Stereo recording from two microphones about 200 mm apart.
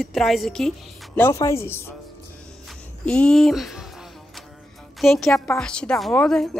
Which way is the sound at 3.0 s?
5° left (ahead or behind).